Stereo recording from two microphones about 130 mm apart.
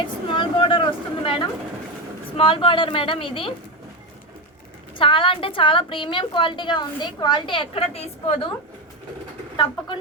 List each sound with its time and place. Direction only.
0.0 s a sound: 40° left (ahead or behind)
2.4 s a woman's voice: 45° left (ahead or behind)
4.9 s a woman's voice: 40° left (ahead or behind)